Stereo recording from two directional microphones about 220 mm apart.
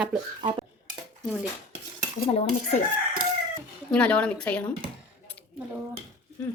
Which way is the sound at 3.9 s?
5° left (ahead or behind).